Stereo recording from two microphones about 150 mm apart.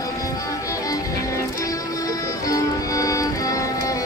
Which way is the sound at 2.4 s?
20° left (ahead or behind).